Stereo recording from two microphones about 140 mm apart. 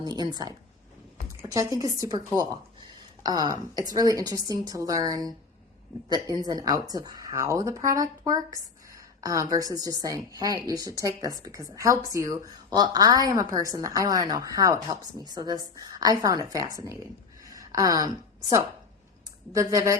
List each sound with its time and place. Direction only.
0.0 s speech: 30° right (ahead or behind)
17.4 s a sound: 25° right (ahead or behind)
19.5 s speech: 20° right (ahead or behind)